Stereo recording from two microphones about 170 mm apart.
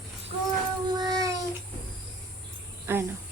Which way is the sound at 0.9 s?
25° right (ahead or behind).